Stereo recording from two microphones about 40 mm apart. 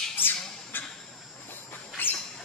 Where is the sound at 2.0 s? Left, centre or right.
Left.